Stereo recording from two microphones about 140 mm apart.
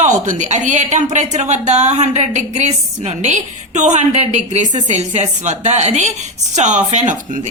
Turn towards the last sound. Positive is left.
turn(degrees=-60)  # may be behind; listen again after turning